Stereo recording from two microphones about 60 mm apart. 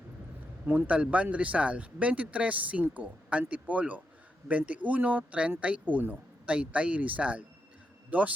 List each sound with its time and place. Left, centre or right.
0.6 s speech: right